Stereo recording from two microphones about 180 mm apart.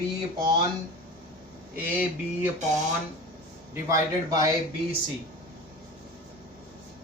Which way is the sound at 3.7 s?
20° right (ahead or behind).